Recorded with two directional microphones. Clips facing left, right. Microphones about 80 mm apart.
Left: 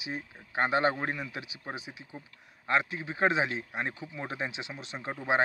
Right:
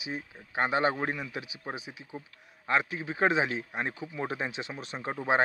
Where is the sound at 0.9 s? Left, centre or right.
Centre.